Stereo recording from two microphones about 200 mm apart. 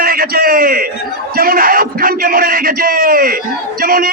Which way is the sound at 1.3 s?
45° right (ahead or behind).